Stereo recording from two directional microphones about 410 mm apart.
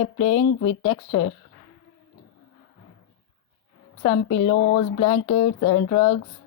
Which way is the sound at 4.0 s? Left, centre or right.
Left.